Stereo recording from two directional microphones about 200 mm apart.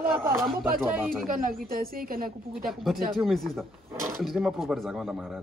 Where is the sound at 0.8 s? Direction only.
5° right (ahead or behind).